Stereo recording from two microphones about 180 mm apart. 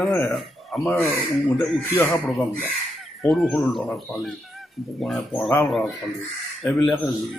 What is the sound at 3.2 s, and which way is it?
Speech, centre (ahead or behind).